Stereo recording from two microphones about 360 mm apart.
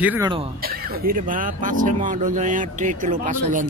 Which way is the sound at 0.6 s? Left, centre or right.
Right.